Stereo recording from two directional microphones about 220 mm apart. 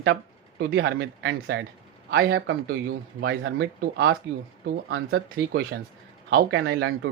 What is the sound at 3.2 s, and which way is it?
Speech, 60° right (ahead or behind).